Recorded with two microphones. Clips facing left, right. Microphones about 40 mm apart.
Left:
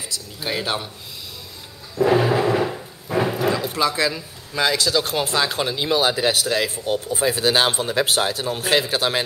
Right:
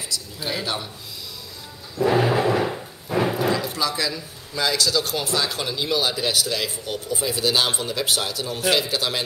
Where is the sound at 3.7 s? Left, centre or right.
Left.